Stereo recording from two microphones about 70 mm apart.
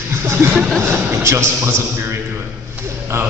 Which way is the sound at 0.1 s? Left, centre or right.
Right.